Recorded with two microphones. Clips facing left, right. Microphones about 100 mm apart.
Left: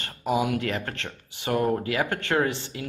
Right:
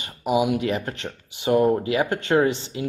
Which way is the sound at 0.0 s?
15° right (ahead or behind).